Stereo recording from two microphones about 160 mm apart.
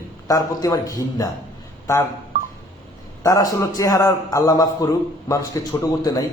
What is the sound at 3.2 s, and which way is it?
A man's voice, 20° left (ahead or behind).